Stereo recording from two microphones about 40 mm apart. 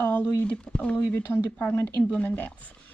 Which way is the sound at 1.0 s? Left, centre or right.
Left.